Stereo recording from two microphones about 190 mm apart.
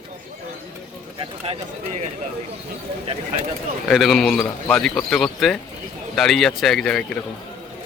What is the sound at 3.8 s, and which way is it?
A man's voice, centre (ahead or behind).